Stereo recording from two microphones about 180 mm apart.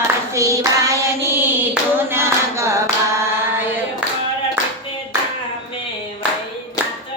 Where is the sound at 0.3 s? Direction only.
15° right (ahead or behind).